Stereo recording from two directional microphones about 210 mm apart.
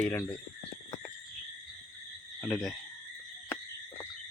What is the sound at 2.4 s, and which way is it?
Speech, 5° left (ahead or behind).